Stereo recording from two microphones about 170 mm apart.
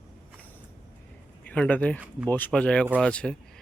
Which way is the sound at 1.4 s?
10° left (ahead or behind).